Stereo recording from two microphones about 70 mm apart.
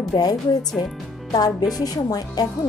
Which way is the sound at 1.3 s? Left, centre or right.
Left.